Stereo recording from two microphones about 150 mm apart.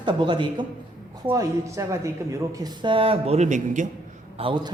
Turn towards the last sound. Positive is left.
turn(degrees=-35)  # may be behind; listen again after turning